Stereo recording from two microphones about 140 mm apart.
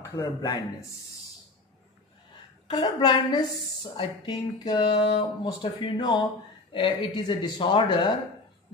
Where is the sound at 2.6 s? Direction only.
30° left (ahead or behind).